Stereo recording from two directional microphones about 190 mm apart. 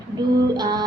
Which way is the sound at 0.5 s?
20° right (ahead or behind).